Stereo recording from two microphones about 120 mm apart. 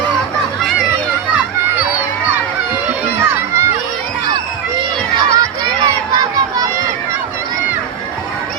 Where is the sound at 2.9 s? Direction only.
20° right (ahead or behind).